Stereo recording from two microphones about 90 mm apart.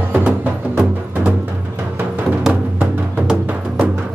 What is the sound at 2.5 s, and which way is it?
Music, 15° right (ahead or behind).